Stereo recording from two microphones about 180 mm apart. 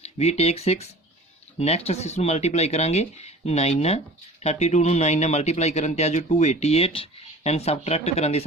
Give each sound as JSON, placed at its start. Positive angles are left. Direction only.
{"t": 0.0, "sound": "speech", "side_deg": 35}